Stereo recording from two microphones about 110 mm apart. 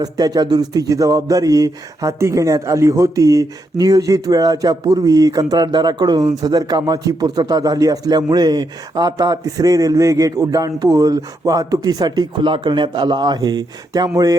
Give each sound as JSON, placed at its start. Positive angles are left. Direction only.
{"t": 0.0, "sound": "speech", "side_deg": -35}